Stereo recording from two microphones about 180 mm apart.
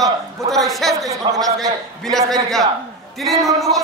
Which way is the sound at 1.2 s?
25° right (ahead or behind).